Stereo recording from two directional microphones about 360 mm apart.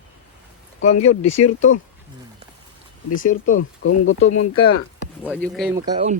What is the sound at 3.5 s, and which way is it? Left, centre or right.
Speech, left.